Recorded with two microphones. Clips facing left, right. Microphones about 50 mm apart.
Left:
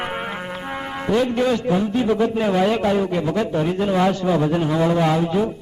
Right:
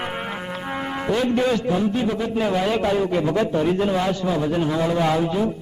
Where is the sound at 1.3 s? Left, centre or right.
Centre.